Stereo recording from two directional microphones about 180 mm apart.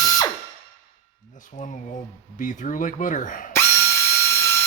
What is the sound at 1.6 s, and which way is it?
Speech, 45° left (ahead or behind).